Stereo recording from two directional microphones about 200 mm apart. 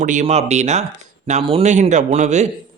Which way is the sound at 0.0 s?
40° right (ahead or behind).